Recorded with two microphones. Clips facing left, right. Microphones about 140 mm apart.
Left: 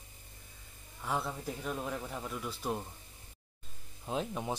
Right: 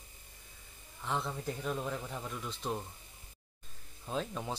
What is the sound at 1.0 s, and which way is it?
Speech, 5° left (ahead or behind).